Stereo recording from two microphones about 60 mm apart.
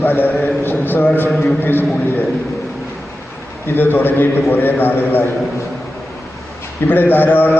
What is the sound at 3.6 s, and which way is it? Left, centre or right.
A man's voice, left.